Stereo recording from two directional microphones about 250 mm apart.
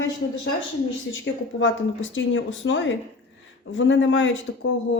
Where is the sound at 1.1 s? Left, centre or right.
Left.